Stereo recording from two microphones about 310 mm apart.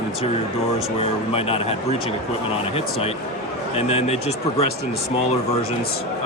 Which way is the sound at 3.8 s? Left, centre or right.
Centre.